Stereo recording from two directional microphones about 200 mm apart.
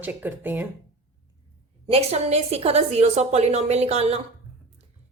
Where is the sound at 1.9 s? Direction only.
30° right (ahead or behind).